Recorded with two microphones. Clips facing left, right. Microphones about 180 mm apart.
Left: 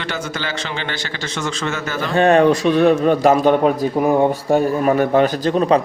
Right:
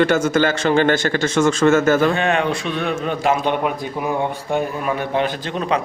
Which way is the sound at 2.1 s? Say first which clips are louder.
Left 7 dB; 40° left (ahead or behind).